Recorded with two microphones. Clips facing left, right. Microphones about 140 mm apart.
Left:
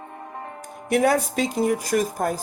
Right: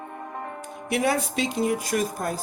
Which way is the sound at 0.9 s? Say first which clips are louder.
Left 4 dB; 45° left (ahead or behind).